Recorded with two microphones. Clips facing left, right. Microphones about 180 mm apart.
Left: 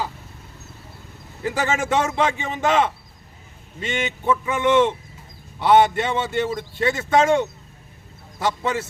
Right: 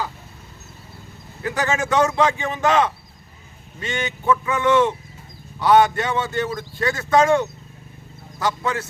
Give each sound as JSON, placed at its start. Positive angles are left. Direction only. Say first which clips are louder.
{"t": 1.5, "sound": "a man's voice", "louder": "even", "side_deg": 25}